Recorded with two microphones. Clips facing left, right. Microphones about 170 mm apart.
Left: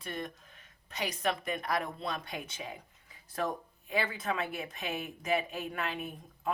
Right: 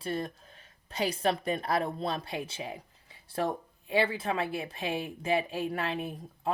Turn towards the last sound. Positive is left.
turn(degrees=-30)  # may be behind; listen again after turning